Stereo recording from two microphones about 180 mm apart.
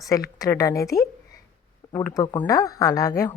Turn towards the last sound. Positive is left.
turn(degrees=15)  # may be behind; listen again after turning